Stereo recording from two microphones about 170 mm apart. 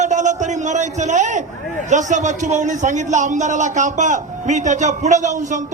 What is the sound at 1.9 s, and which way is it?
A man's voice, 45° right (ahead or behind).